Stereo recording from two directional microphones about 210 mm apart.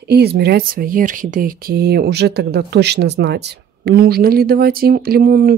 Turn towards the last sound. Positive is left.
turn(degrees=-45)  # may be behind; listen again after turning